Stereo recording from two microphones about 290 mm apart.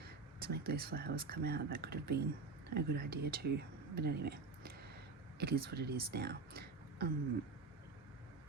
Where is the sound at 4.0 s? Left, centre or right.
Right.